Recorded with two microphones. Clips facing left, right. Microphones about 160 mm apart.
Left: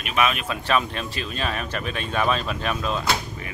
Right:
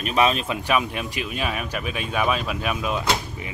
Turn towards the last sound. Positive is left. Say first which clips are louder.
# right 1 dB
turn(degrees=-10)  # may be behind; listen again after turning